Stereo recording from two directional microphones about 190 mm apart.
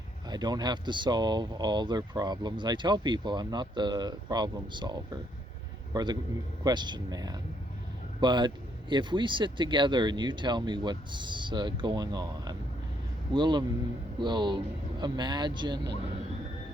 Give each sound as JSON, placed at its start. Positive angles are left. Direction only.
{"t": 0.3, "sound": "a man's voice", "side_deg": -20}